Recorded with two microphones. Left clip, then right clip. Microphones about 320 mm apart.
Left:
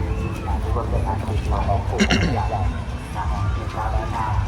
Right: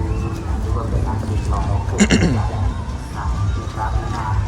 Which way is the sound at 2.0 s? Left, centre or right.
Right.